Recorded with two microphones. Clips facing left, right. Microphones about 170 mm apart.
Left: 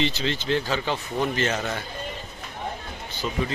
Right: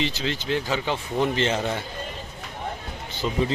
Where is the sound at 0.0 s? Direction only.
5° right (ahead or behind); by 1.7 s 25° right (ahead or behind).